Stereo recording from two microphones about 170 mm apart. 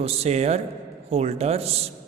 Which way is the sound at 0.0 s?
35° right (ahead or behind).